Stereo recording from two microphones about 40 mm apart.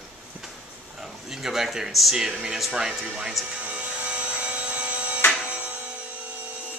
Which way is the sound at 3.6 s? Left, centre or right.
Right.